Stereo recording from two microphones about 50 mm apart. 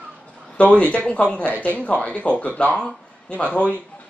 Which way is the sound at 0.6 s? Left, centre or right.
Left.